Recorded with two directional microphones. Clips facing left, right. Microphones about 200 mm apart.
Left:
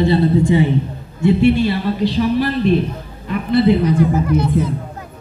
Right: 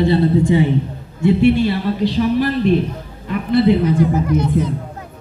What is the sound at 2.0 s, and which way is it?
Speech, 50° right (ahead or behind).